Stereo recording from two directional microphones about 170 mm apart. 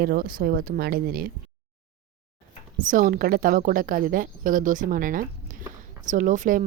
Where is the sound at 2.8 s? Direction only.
50° right (ahead or behind).